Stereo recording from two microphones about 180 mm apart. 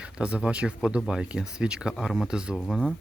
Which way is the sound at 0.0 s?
5° right (ahead or behind).